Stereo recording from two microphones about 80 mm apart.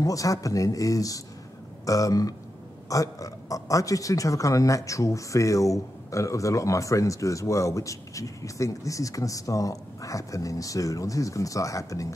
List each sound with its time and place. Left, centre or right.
0.0 s speech: left